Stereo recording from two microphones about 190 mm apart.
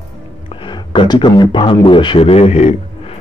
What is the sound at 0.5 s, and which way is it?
A man's voice, 25° left (ahead or behind).